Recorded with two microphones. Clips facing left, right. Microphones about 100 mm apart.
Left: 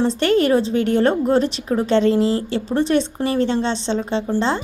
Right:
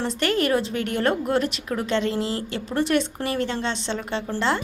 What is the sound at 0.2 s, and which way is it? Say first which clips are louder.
A woman's voice: left 4 dB; 30° left (ahead or behind).